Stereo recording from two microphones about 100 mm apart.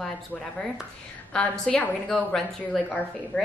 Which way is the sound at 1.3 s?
10° left (ahead or behind).